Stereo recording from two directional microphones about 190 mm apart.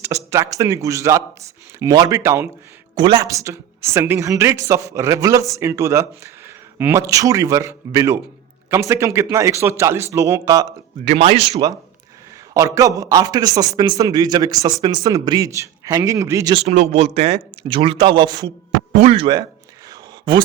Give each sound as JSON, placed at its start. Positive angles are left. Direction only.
{"t": 0.0, "sound": "a woman's voice", "side_deg": -15}
{"t": 11.0, "sound": "speech", "side_deg": -35}
{"t": 12.5, "sound": "a man's voice", "side_deg": -15}
{"t": 16.6, "sound": "a man's voice", "side_deg": -35}